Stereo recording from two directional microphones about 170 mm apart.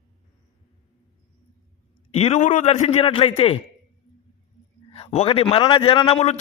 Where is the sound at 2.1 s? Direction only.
40° left (ahead or behind).